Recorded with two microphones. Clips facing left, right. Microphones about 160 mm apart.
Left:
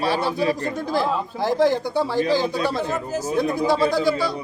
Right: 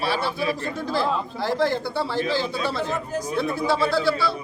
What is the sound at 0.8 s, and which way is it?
A man's voice, 15° left (ahead or behind).